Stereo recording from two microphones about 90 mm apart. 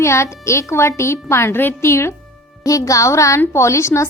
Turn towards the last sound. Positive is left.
turn(degrees=35)  # may be behind; listen again after turning